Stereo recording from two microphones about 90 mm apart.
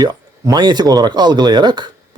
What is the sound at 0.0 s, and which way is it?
Speech, 50° right (ahead or behind).